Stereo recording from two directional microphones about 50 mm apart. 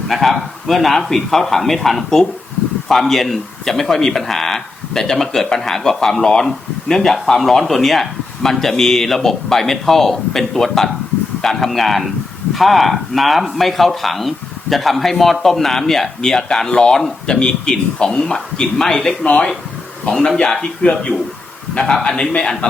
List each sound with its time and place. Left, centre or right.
0.1 s speech: centre
19.2 s speech: left